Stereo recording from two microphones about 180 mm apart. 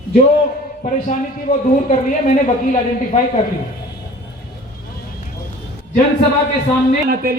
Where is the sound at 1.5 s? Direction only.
45° left (ahead or behind).